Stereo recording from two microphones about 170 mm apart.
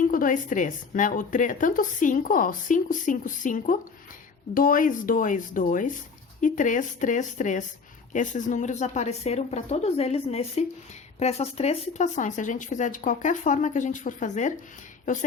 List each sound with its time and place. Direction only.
0.1 s a woman's voice: 55° left (ahead or behind)